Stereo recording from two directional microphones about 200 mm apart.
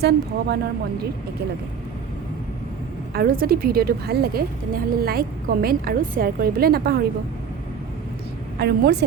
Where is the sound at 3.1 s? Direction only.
45° right (ahead or behind).